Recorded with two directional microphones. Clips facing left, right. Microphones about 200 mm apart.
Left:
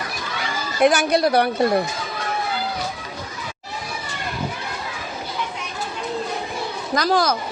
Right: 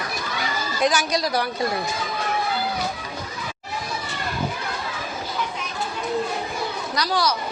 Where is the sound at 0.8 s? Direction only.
60° left (ahead or behind).